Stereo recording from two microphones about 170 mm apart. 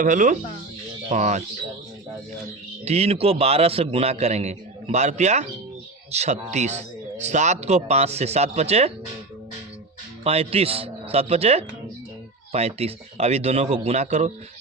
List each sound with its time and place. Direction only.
0.0 s speech: 50° right (ahead or behind)
2.8 s a man's voice: 40° right (ahead or behind)
10.2 s a man's voice: 35° right (ahead or behind)